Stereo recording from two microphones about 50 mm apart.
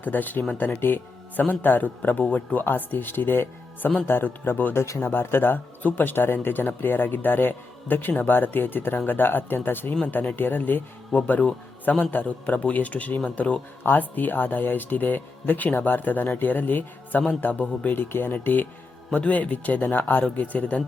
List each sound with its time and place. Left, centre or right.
0.0 s speech: left
2.6 s a man's voice: left
18.0 s speech: left